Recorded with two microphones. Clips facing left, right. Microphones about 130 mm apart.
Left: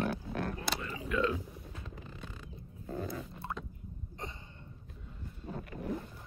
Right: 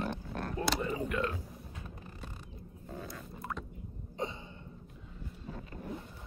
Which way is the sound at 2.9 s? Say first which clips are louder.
Left 5 dB; 55° left (ahead or behind).